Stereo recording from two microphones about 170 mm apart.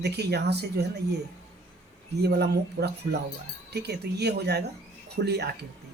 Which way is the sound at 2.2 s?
75° right (ahead or behind).